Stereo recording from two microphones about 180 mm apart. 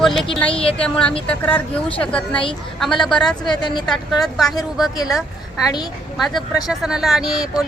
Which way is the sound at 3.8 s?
Centre (ahead or behind).